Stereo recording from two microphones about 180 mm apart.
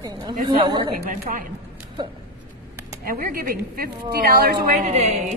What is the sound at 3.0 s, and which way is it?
A woman's voice, 55° right (ahead or behind).